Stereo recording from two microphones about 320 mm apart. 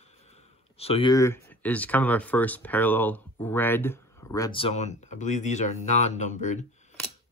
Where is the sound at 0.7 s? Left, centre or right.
Centre.